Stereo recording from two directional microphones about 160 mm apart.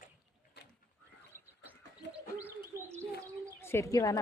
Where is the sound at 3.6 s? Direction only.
15° left (ahead or behind).